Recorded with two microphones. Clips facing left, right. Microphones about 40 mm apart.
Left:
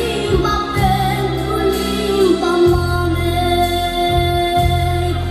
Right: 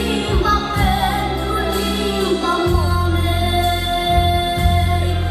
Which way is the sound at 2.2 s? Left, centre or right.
Right.